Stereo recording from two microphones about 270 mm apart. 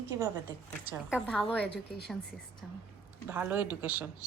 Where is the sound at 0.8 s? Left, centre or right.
Centre.